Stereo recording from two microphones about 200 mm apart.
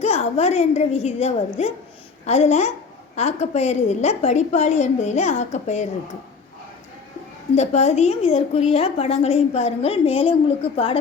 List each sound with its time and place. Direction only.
0.0 s a woman's voice: 35° left (ahead or behind)
7.5 s a woman's voice: 35° left (ahead or behind)